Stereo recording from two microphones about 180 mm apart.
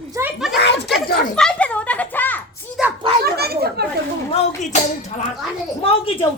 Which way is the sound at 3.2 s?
60° right (ahead or behind).